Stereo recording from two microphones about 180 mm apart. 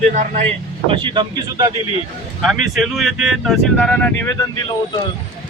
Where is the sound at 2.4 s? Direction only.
Centre (ahead or behind); by 4.6 s 20° left (ahead or behind).